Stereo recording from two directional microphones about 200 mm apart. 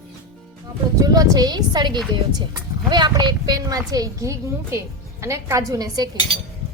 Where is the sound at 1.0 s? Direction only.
20° right (ahead or behind).